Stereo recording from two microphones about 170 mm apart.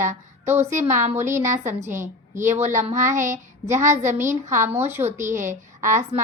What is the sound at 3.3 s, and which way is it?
Child singing, 15° right (ahead or behind).